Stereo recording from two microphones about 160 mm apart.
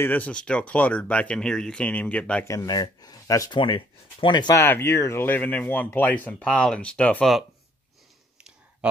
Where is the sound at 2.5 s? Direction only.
20° left (ahead or behind).